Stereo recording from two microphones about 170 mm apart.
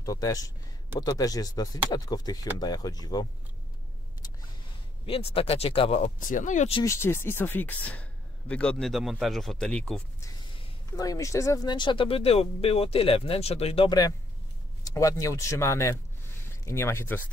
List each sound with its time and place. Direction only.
0.0 s speech: 20° left (ahead or behind)
5.0 s speech: 35° left (ahead or behind)
6.7 s speech: 20° left (ahead or behind)
10.6 s speech: 20° left (ahead or behind)